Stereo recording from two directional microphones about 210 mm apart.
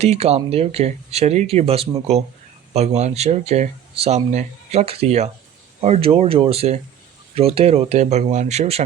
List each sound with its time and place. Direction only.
0.0 s speech: 30° right (ahead or behind)